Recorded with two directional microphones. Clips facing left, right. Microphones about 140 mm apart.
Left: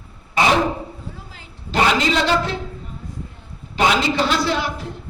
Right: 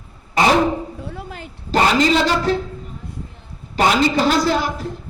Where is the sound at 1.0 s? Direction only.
65° right (ahead or behind).